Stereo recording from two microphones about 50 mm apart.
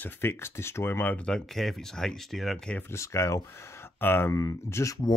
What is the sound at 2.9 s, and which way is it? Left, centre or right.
Speech, left.